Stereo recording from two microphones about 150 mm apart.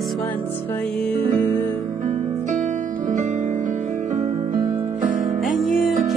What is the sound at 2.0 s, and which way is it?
Music, 60° right (ahead or behind).